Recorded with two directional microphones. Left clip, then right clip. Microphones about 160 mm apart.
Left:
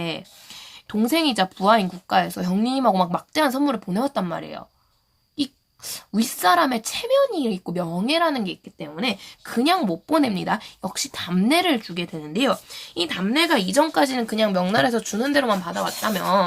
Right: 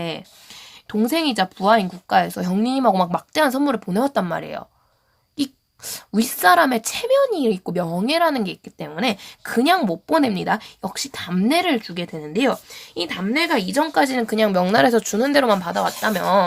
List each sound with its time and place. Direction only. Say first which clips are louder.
0.0 s speech: right 1 dB; 20° right (ahead or behind)